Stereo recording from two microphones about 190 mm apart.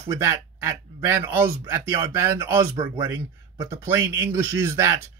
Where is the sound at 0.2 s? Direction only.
15° right (ahead or behind).